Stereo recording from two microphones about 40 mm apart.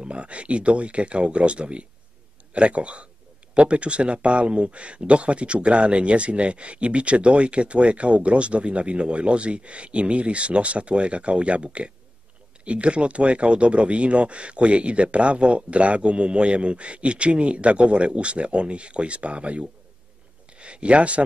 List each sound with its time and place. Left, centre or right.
0.0 s a man's voice: right